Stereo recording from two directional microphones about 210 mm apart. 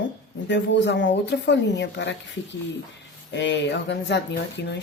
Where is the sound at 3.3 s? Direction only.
60° left (ahead or behind).